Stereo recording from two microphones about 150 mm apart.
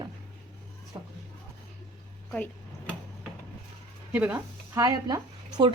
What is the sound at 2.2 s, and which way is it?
Speech, 10° left (ahead or behind).